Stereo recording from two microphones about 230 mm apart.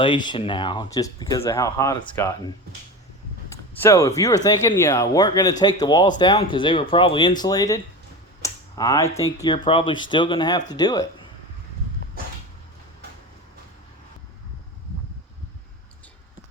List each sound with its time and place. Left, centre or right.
0.0 s speech: centre
3.5 s speech: centre
8.4 s a sound: centre
9.1 s speech: centre